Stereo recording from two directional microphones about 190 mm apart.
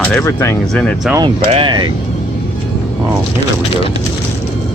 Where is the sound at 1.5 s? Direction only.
25° right (ahead or behind).